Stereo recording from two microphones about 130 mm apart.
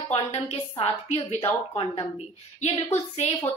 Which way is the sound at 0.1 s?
50° left (ahead or behind).